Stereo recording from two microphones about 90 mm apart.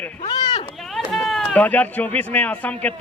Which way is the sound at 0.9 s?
Centre (ahead or behind).